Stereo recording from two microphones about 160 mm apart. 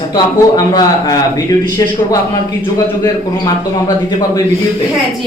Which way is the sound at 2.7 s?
25° left (ahead or behind).